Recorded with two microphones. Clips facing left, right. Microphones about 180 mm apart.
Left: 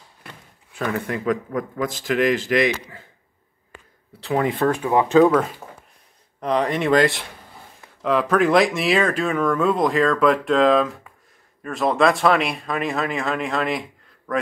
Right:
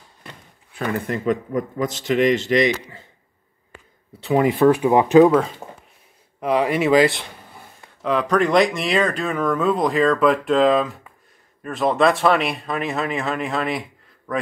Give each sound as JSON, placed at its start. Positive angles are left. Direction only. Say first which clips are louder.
{"t": 0.7, "sound": "speech", "louder": "right 1 dB", "side_deg": 0}
{"t": 4.2, "sound": "speech", "louder": "right 4 dB", "side_deg": -5}
{"t": 6.4, "sound": "speech", "louder": "right 2 dB", "side_deg": -5}